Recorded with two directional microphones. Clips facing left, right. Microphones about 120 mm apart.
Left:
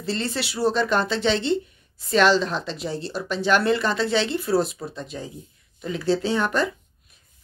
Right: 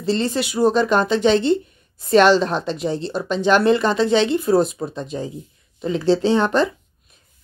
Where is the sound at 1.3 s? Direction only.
50° right (ahead or behind).